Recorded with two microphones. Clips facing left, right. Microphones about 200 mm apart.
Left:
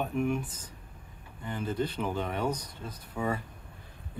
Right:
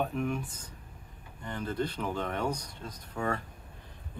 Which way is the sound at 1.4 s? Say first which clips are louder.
Left 1 dB; 5° left (ahead or behind).